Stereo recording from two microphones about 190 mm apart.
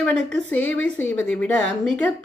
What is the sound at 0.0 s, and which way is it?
Speech, 5° left (ahead or behind).